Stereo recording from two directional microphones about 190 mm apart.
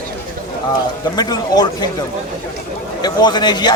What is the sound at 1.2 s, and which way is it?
Speech, 20° left (ahead or behind).